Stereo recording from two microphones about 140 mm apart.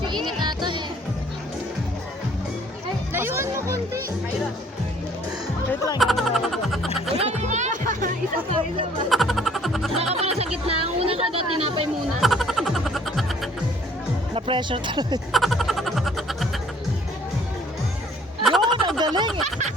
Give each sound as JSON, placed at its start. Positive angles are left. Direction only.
{"t": 0.1, "sound": "music", "side_deg": -35}
{"t": 3.1, "sound": "music", "side_deg": -15}
{"t": 6.0, "sound": "music", "side_deg": 0}
{"t": 7.2, "sound": "music", "side_deg": -55}
{"t": 9.0, "sound": "music", "side_deg": 0}
{"t": 10.2, "sound": "music", "side_deg": -45}
{"t": 12.2, "sound": "music", "side_deg": 0}
{"t": 14.3, "sound": "speech", "side_deg": -40}
{"t": 15.3, "sound": "music", "side_deg": 0}
{"t": 18.4, "sound": "a sound", "side_deg": 0}
{"t": 18.9, "sound": "a sound", "side_deg": -30}